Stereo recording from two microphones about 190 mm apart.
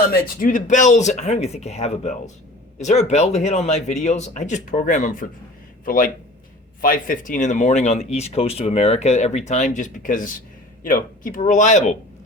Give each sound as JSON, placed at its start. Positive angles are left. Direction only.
{"t": 0.1, "sound": "speech", "side_deg": 45}